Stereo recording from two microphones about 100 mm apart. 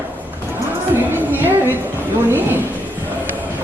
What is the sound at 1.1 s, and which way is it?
Music, 20° right (ahead or behind).